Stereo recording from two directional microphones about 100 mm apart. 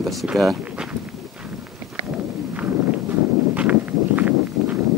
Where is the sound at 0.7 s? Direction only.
10° right (ahead or behind).